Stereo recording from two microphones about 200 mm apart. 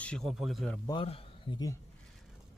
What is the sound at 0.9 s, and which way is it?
Speech, 25° left (ahead or behind).